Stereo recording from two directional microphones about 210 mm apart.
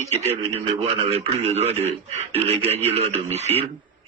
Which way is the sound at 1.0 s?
30° right (ahead or behind).